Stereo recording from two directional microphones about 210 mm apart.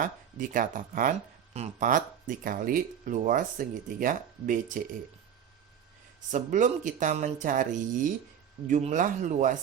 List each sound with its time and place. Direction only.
0.0 s speech: 40° right (ahead or behind)
6.3 s speech: 35° right (ahead or behind)